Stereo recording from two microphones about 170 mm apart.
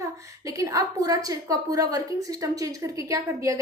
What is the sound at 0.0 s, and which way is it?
A woman's voice, 20° right (ahead or behind).